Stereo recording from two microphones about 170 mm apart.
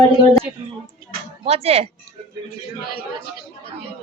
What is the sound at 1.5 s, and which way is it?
Speech, 35° right (ahead or behind).